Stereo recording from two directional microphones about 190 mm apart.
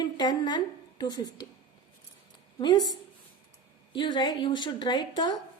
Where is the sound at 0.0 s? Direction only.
20° left (ahead or behind).